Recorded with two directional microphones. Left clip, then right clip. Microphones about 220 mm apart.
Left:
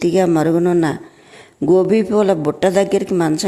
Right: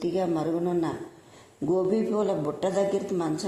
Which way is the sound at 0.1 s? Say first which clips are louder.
Left 12 dB; 35° left (ahead or behind).